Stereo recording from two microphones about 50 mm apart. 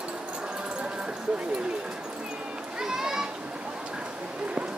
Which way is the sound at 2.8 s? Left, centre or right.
Centre.